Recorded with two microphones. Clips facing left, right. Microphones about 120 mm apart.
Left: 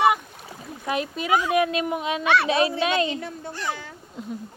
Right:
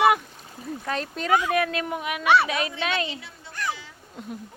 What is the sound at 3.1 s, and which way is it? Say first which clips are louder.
Speech: left 8 dB; 50° left (ahead or behind).